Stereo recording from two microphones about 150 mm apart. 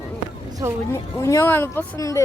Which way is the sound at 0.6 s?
15° right (ahead or behind).